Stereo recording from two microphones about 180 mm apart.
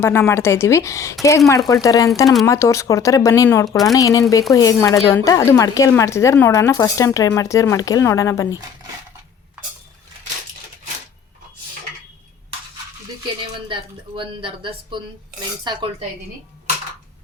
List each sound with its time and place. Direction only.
0.0 s speech: 15° left (ahead or behind)
14.2 s speech: 30° right (ahead or behind)